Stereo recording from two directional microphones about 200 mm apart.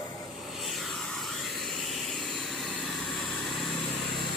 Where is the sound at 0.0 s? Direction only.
20° left (ahead or behind).